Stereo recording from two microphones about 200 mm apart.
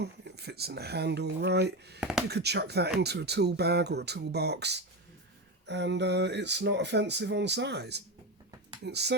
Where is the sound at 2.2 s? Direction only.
55° right (ahead or behind).